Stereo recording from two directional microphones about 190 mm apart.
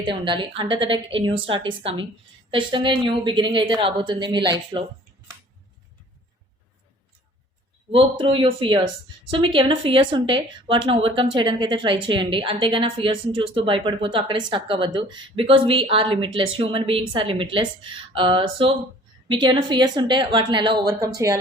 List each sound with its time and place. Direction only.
0.0 s speech: 25° right (ahead or behind)
7.9 s speech: 30° right (ahead or behind)